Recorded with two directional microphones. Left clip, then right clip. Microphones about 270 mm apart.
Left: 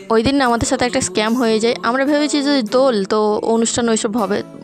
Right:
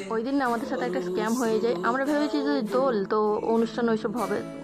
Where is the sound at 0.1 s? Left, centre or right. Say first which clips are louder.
Left 12 dB; left.